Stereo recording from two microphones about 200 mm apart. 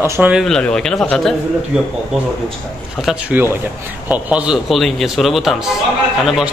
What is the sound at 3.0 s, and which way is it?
Speech, 5° right (ahead or behind).